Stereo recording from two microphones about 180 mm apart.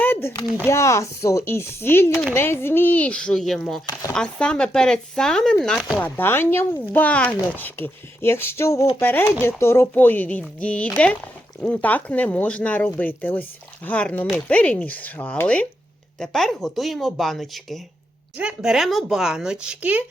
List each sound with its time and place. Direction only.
0.0 s a sound: 15° left (ahead or behind)
0.6 s speech: 15° left (ahead or behind); by 6.0 s centre (ahead or behind)
6.0 s speech: 10° left (ahead or behind); by 20.1 s 10° right (ahead or behind)